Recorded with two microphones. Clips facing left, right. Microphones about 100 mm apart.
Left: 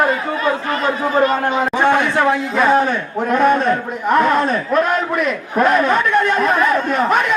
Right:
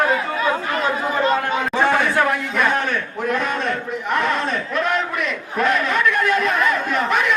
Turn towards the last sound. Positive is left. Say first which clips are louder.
# left 4 dB
turn(degrees=40)  # may be behind; listen again after turning